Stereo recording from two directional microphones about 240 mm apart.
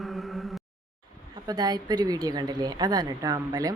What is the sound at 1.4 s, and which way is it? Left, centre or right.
A woman's voice, centre.